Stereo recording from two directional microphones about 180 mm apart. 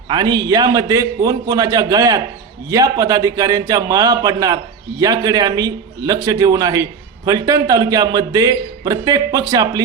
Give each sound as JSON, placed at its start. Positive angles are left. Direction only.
{"t": 0.1, "sound": "a man's voice", "side_deg": -25}